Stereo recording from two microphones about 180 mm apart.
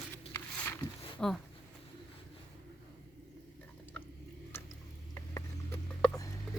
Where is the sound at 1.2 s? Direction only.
5° left (ahead or behind).